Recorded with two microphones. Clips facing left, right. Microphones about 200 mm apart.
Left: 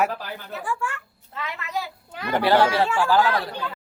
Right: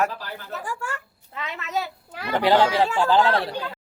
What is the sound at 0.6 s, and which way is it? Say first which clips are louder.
Speech: left 5 dB; 40° right (ahead or behind).